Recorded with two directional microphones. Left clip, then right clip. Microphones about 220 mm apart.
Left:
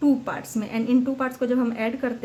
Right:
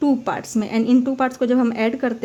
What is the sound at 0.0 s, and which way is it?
A woman's voice, 40° right (ahead or behind).